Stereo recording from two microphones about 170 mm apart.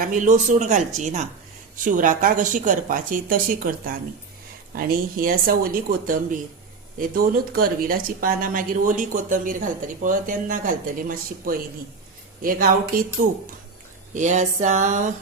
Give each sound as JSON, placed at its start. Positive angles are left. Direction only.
{"t": 0.0, "sound": "speech", "side_deg": -50}